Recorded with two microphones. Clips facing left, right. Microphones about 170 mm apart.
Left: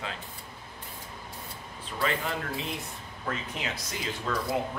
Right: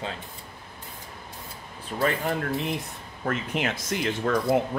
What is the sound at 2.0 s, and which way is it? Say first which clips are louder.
Speech: right 5 dB; 45° right (ahead or behind).